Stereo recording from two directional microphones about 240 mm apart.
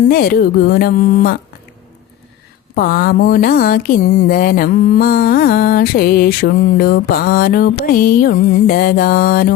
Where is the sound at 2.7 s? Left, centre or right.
Left.